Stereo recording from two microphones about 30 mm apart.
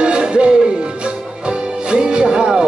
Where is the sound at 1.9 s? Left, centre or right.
Right.